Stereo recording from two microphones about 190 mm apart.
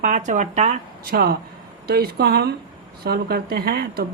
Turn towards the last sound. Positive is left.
turn(degrees=-55)  # may be behind; listen again after turning